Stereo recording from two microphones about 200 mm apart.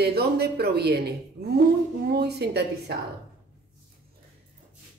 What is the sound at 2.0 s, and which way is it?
Speech, 55° right (ahead or behind).